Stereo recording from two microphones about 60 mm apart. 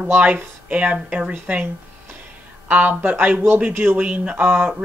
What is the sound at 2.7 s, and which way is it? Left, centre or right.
Speech, right.